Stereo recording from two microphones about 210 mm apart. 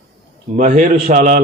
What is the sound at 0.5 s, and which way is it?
Speech, 40° right (ahead or behind).